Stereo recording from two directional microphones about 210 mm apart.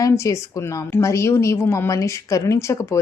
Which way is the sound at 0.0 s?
15° left (ahead or behind).